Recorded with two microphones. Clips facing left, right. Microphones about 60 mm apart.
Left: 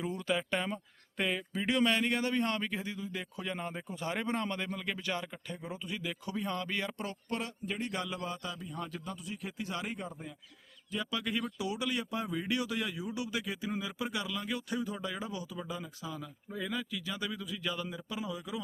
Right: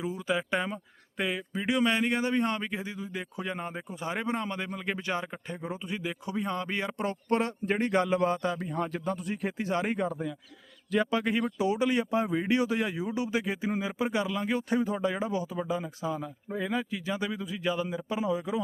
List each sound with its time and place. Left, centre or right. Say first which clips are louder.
0.0 s a man's voice: right 3 dB; centre; by 10.0 s right
11.0 s speech: right 5 dB; right